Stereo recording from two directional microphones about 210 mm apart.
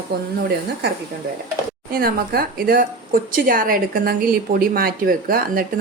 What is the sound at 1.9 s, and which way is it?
Speech, 45° right (ahead or behind).